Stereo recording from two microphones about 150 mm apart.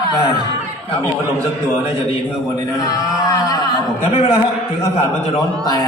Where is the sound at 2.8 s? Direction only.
25° left (ahead or behind).